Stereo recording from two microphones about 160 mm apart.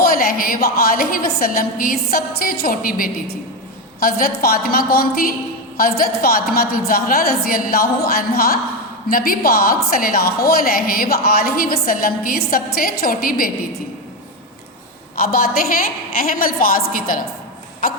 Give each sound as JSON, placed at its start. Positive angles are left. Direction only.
{"t": 0.0, "sound": "a woman's voice", "side_deg": 65}
{"t": 15.1, "sound": "a woman's voice", "side_deg": 70}